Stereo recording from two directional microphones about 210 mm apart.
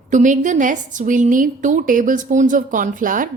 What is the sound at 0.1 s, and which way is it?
A woman's voice, 35° right (ahead or behind).